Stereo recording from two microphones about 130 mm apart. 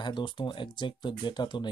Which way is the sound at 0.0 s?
35° left (ahead or behind).